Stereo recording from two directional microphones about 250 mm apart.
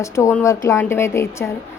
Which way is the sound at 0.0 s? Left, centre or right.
Centre.